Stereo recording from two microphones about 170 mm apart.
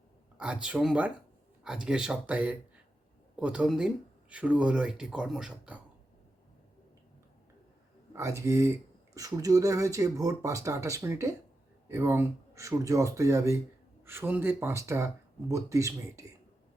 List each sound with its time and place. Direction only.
0.3 s speech: 5° right (ahead or behind)
8.1 s speech: 15° right (ahead or behind)